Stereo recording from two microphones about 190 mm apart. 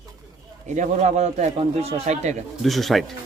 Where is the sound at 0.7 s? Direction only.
40° right (ahead or behind).